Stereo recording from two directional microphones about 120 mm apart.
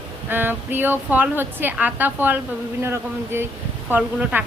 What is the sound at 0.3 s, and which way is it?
A man's voice, 20° right (ahead or behind).